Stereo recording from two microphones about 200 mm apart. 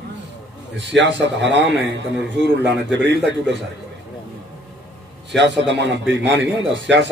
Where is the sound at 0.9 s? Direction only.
65° right (ahead or behind).